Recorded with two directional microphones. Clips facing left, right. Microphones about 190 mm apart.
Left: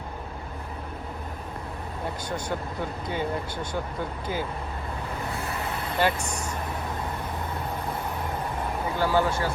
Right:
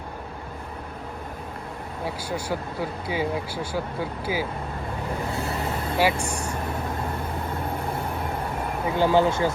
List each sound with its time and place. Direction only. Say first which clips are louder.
2.0 s speech: right 2 dB; 5° right (ahead or behind)
6.0 s speech: right 2 dB; 10° right (ahead or behind)
9.0 s speech: right 5 dB; 20° right (ahead or behind)